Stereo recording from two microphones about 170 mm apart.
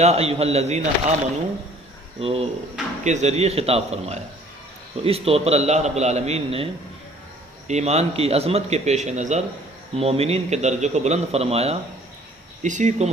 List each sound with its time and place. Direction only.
0.0 s a man's voice: 40° right (ahead or behind)
2.2 s a man's voice: 35° right (ahead or behind)
7.7 s a man's voice: 40° right (ahead or behind)